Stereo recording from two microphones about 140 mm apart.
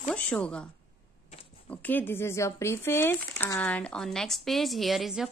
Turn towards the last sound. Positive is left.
turn(degrees=0)  # may be behind; listen again after turning